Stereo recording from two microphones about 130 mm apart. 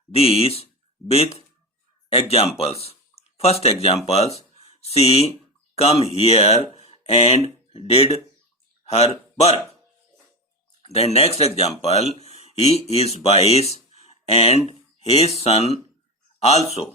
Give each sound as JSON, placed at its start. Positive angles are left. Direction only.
{"t": 0.1, "sound": "speech", "side_deg": 50}
{"t": 10.8, "sound": "speech", "side_deg": 55}